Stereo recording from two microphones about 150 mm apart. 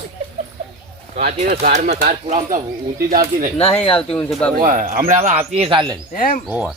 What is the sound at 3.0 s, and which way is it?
Speech, 65° right (ahead or behind).